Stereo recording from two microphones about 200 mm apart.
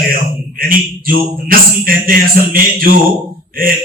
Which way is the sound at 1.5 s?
45° right (ahead or behind).